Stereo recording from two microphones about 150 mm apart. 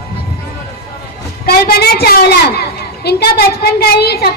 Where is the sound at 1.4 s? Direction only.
90° left.